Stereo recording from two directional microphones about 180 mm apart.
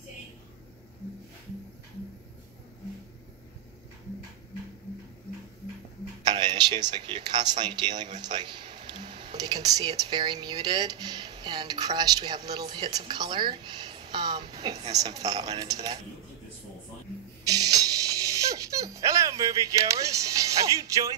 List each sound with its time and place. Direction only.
6.2 s a woman's voice: 25° right (ahead or behind)
17.5 s music: 20° right (ahead or behind)